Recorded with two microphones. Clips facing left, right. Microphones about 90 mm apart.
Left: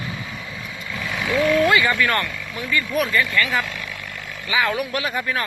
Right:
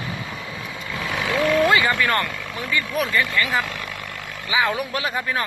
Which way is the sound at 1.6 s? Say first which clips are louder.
Even; 30° right (ahead or behind).